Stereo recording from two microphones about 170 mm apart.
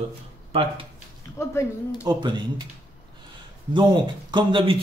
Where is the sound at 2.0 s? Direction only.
25° right (ahead or behind).